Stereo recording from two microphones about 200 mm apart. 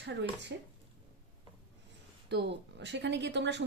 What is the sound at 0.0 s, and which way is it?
Speech, 60° right (ahead or behind).